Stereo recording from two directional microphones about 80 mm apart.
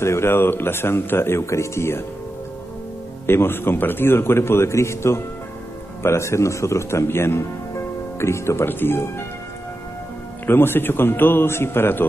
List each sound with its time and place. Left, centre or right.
0.0 s speech: left
3.3 s speech: left
10.4 s a man's voice: left